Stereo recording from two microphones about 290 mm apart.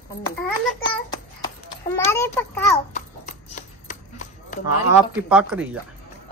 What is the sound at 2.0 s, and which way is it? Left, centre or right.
Speech, centre.